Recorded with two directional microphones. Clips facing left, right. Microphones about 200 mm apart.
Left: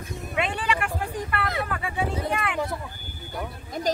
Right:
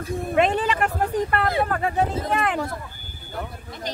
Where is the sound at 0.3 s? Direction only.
40° right (ahead or behind).